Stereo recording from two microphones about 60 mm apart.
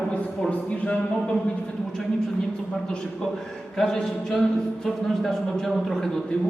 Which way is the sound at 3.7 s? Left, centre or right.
Centre.